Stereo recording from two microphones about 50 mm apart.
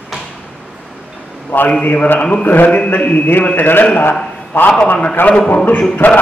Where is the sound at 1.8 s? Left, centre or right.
Left.